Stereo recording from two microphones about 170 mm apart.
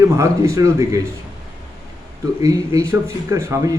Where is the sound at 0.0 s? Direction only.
20° right (ahead or behind).